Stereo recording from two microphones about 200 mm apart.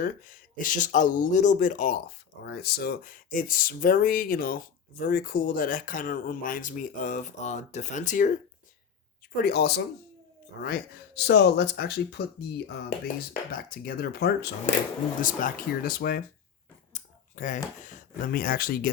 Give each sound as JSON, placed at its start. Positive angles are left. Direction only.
{"t": 0.0, "sound": "speech", "side_deg": 40}
{"t": 2.0, "sound": "speech", "side_deg": 55}
{"t": 9.3, "sound": "speech", "side_deg": 50}
{"t": 15.2, "sound": "speech", "side_deg": 40}